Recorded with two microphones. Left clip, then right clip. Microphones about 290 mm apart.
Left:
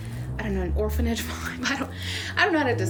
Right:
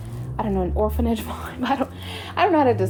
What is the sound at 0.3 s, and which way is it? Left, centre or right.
A woman's voice, centre.